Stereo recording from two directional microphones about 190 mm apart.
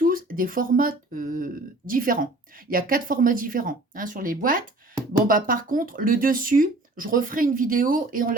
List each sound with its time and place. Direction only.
0.0 s speech: 45° right (ahead or behind)